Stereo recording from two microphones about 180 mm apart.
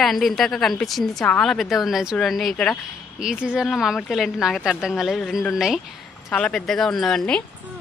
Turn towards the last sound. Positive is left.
turn(degrees=5)  # may be behind; listen again after turning